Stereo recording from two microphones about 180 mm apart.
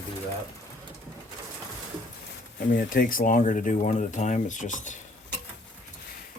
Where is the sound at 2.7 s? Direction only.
50° left (ahead or behind).